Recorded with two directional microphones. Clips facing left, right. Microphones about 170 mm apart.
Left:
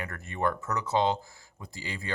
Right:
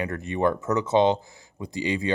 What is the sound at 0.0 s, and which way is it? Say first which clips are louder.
Speech: right 7 dB; 20° right (ahead or behind).